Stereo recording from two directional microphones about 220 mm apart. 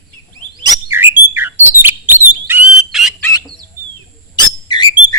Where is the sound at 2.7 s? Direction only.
Centre (ahead or behind).